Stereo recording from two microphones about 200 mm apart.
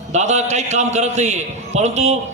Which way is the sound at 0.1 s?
35° right (ahead or behind).